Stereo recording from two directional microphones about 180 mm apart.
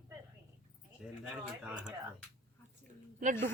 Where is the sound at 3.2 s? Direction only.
45° right (ahead or behind).